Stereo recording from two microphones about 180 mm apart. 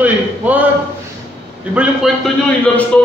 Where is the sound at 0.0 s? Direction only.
10° right (ahead or behind).